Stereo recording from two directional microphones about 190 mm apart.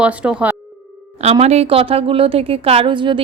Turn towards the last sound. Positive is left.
turn(degrees=-25)  # may be behind; listen again after turning